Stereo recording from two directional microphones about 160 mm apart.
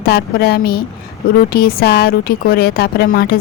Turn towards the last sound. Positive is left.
turn(degrees=70)  # may be behind; listen again after turning